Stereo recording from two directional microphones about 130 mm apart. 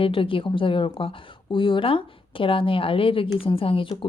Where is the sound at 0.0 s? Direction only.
45° left (ahead or behind).